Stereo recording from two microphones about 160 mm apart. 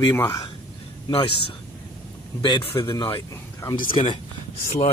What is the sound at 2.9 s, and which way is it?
Speech, 20° left (ahead or behind).